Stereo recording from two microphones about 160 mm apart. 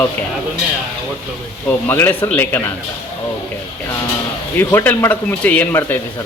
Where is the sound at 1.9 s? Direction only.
15° left (ahead or behind).